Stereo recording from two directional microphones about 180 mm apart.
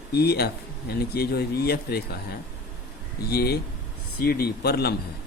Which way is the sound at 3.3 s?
60° left (ahead or behind).